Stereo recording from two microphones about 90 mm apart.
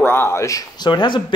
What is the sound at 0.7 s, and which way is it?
Speech, 55° left (ahead or behind).